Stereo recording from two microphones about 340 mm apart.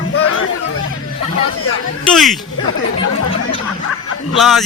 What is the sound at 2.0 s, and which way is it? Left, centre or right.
Speech, centre.